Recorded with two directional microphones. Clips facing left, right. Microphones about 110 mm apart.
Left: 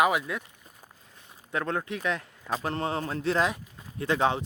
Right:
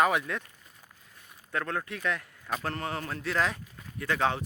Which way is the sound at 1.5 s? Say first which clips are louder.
Left 3 dB; 20° left (ahead or behind).